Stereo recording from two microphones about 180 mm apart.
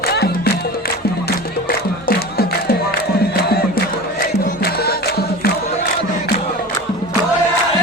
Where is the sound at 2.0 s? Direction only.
55° left (ahead or behind).